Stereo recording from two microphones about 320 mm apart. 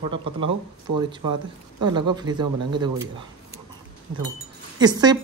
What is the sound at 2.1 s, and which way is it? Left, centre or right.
Speech, centre.